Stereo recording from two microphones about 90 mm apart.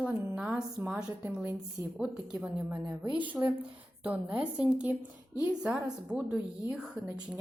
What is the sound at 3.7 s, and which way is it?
A woman's voice, 15° right (ahead or behind).